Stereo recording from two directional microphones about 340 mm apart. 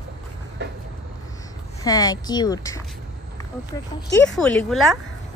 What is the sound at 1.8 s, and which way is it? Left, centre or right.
A woman's voice, centre.